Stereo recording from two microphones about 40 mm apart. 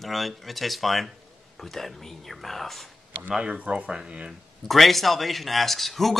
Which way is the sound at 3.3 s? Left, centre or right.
Right.